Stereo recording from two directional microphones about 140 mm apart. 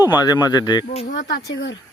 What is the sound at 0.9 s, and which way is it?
Speech, 50° left (ahead or behind).